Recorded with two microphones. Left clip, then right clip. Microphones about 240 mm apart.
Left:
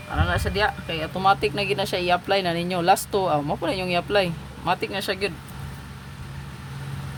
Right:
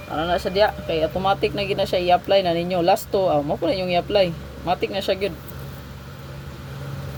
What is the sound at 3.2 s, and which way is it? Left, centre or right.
Speech, left.